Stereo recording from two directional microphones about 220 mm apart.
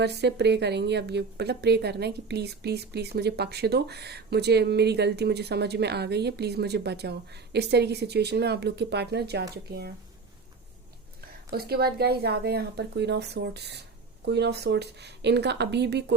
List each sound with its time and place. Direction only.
0.0 s a woman's voice: 50° right (ahead or behind)
11.5 s a woman's voice: 45° right (ahead or behind)